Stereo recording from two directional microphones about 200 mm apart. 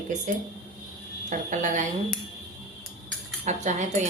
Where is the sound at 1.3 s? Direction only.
40° right (ahead or behind).